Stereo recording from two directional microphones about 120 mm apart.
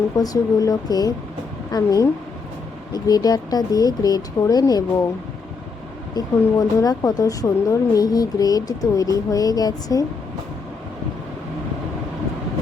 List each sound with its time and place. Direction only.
0.2 s speech: 30° left (ahead or behind)
6.6 s speech: 30° left (ahead or behind)